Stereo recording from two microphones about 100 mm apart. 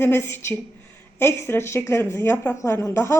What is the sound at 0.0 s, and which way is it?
A woman's voice, 20° left (ahead or behind).